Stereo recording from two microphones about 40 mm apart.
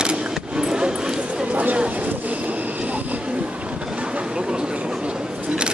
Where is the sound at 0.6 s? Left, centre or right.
Centre.